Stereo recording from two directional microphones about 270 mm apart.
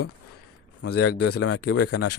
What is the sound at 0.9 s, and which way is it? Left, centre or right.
Speech, left.